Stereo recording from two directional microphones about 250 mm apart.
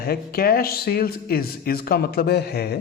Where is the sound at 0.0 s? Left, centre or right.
Left.